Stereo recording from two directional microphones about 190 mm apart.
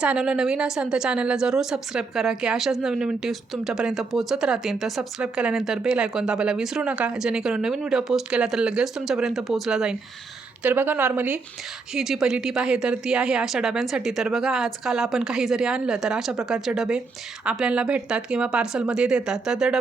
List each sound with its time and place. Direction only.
0.0 s a woman's voice: 5° right (ahead or behind)